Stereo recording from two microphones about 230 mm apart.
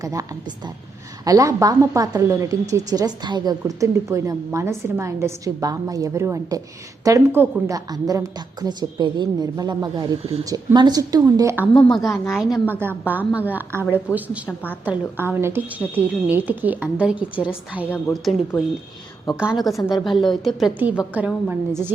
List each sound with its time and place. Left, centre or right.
0.0 s a woman's voice: centre
11.7 s a woman's voice: centre
14.1 s a woman's voice: centre
14.8 s a woman's voice: centre